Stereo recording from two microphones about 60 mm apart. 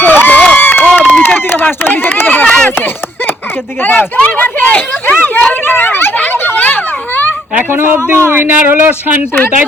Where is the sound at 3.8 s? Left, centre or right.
Left.